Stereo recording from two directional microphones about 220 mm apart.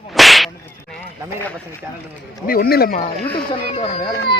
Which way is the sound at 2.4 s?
40° left (ahead or behind).